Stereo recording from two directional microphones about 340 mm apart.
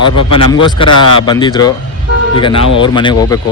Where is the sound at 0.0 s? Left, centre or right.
Left.